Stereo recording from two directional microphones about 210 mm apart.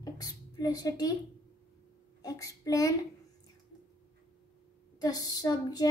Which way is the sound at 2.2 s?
15° left (ahead or behind).